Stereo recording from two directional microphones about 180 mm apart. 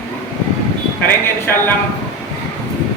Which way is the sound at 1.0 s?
10° left (ahead or behind).